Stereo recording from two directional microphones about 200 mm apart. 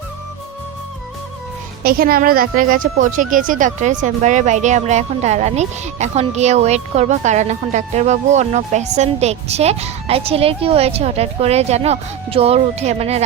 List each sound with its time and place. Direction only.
1.8 s speech: 50° right (ahead or behind); by 13.2 s 30° right (ahead or behind)